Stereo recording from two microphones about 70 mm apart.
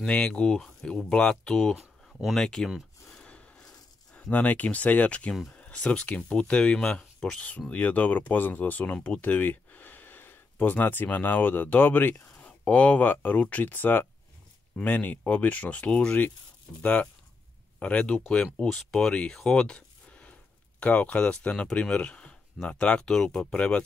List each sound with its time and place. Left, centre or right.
0.0 s speech: centre
1.8 s a sound: centre
2.3 s speech: centre
3.1 s a sound: centre
5.5 s speech: centre
7.7 s speech: left